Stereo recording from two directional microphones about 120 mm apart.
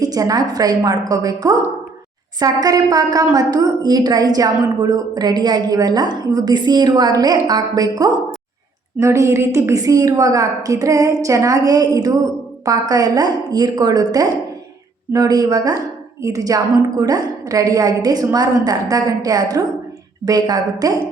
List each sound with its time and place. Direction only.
0.0 s a woman's voice: 30° right (ahead or behind)